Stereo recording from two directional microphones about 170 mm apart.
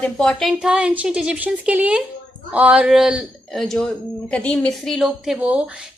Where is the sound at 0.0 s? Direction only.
5° left (ahead or behind).